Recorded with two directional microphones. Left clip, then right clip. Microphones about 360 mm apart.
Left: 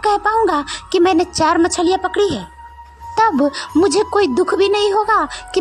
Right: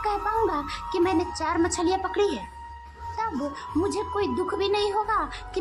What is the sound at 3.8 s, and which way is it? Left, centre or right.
A woman's voice, centre.